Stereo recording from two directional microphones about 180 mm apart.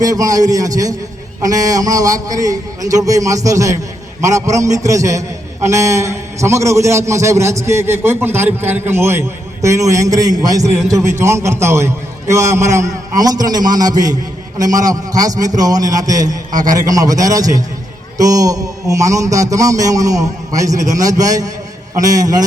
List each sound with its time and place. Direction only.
0.0 s a man's voice: 20° right (ahead or behind)